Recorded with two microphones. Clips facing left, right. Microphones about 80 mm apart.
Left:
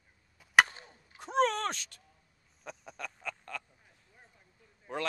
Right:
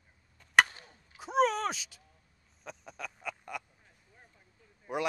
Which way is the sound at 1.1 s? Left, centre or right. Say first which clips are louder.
Right 1 dB; centre.